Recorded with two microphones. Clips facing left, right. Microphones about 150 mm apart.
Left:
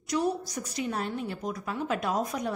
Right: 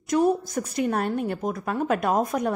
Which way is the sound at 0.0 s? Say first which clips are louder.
Right 7 dB; 50° right (ahead or behind).